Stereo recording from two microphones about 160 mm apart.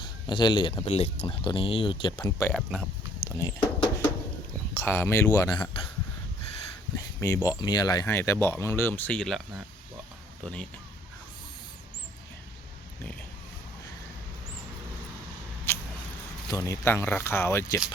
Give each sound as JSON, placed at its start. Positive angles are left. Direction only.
{"t": 0.0, "sound": "speech", "side_deg": 30}
{"t": 0.9, "sound": "speech", "side_deg": 40}
{"t": 2.5, "sound": "speech", "side_deg": 0}
{"t": 3.2, "sound": "a sound", "side_deg": 25}
{"t": 4.7, "sound": "speech", "side_deg": 15}
{"t": 6.9, "sound": "speech", "side_deg": 20}
{"t": 15.7, "sound": "a sound", "side_deg": 15}
{"t": 16.5, "sound": "speech", "side_deg": 20}